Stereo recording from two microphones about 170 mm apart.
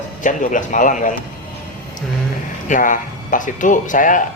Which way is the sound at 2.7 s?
50° left (ahead or behind).